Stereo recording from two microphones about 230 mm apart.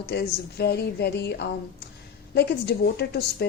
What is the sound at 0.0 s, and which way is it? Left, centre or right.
A woman's voice, left.